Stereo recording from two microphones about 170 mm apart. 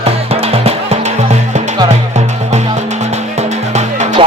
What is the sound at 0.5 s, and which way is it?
Music, 35° right (ahead or behind).